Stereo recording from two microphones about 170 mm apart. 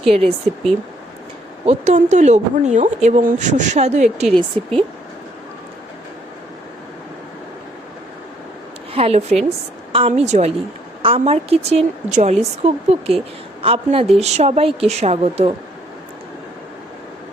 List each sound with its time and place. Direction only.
0.1 s speech: 35° right (ahead or behind)
1.6 s a woman's voice: 45° right (ahead or behind)
4.3 s speech: 5° left (ahead or behind)
8.9 s a woman's voice: 35° right (ahead or behind)